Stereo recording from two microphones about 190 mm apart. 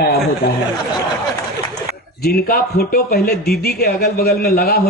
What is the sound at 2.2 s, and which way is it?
A man's voice, 55° left (ahead or behind).